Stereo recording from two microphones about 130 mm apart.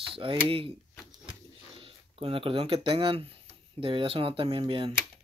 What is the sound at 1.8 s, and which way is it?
Speech, 45° right (ahead or behind).